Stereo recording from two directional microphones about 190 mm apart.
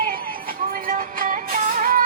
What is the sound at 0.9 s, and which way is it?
Music, 45° right (ahead or behind).